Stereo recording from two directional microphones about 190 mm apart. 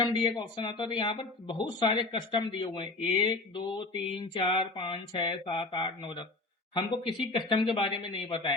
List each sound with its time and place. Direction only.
0.0 s speech: 25° left (ahead or behind)